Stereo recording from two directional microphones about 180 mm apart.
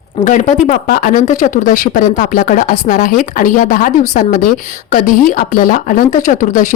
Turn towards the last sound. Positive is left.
turn(degrees=45)  # may be behind; listen again after turning